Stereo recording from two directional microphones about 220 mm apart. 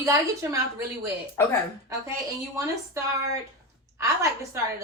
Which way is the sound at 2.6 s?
15° right (ahead or behind).